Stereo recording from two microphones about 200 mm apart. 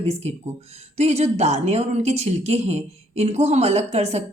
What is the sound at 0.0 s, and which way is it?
Speech, 30° right (ahead or behind).